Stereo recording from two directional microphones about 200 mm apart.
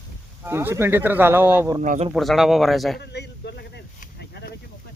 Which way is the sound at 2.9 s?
55° left (ahead or behind).